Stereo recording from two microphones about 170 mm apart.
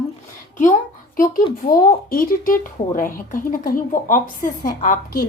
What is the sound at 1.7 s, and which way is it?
Speech, 55° left (ahead or behind).